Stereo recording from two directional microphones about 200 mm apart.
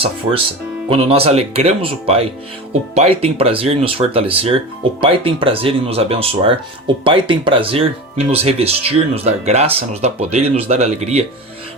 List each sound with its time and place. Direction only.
0.9 s speech: 30° right (ahead or behind)